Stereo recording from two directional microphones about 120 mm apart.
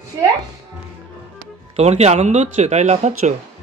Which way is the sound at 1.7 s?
65° right (ahead or behind).